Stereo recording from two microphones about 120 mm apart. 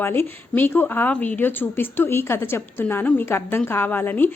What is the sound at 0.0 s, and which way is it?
A woman's voice, 20° left (ahead or behind).